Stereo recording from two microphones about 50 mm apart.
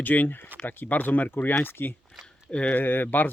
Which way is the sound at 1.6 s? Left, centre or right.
Left.